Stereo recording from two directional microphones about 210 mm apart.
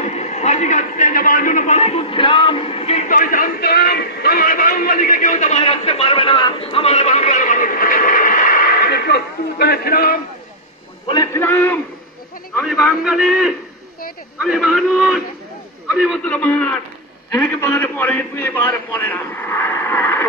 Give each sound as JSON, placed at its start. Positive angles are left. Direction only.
{"t": 0.0, "sound": "a man's voice", "side_deg": 30}
{"t": 11.1, "sound": "a man's voice", "side_deg": 15}
{"t": 12.5, "sound": "a man's voice", "side_deg": 0}